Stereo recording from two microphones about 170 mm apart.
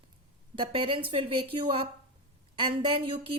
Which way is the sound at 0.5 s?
30° right (ahead or behind).